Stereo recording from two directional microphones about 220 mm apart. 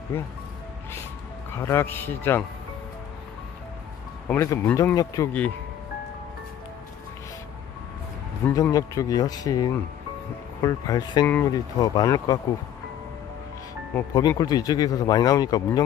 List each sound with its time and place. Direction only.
1.5 s speech: 10° left (ahead or behind)
4.3 s speech: 15° left (ahead or behind)
8.4 s speech: 10° left (ahead or behind)
13.9 s speech: 15° left (ahead or behind)